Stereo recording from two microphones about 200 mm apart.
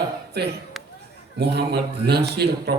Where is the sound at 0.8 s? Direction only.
Centre (ahead or behind).